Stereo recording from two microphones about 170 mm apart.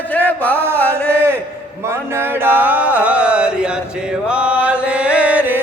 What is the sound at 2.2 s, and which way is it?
Chant, 10° right (ahead or behind).